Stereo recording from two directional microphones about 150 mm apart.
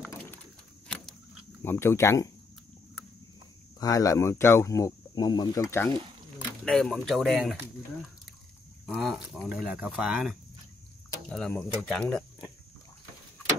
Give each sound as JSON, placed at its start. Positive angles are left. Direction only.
{"t": 0.8, "sound": "a sound", "side_deg": 5}
{"t": 1.6, "sound": "speech", "side_deg": 15}
{"t": 3.8, "sound": "speech", "side_deg": 25}
{"t": 6.6, "sound": "speech", "side_deg": 0}
{"t": 8.8, "sound": "speech", "side_deg": 0}